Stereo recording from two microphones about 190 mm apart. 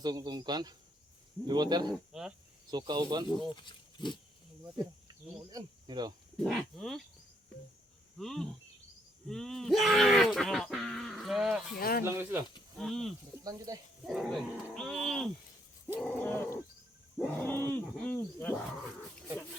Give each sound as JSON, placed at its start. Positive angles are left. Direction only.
{"t": 0.0, "sound": "speech", "side_deg": -20}
{"t": 1.9, "sound": "speech", "side_deg": -5}
{"t": 2.6, "sound": "speech", "side_deg": -20}
{"t": 3.5, "sound": "speech", "side_deg": 25}
{"t": 5.5, "sound": "speech", "side_deg": -20}
{"t": 6.4, "sound": "speech", "side_deg": 0}
{"t": 8.2, "sound": "speech", "side_deg": 0}
{"t": 11.8, "sound": "speech", "side_deg": 50}
{"t": 12.0, "sound": "speech", "side_deg": -15}
{"t": 12.8, "sound": "speech", "side_deg": 0}
{"t": 13.4, "sound": "speech", "side_deg": -20}
{"t": 14.0, "sound": "speech", "side_deg": 0}
{"t": 16.0, "sound": "wild animals", "side_deg": 10}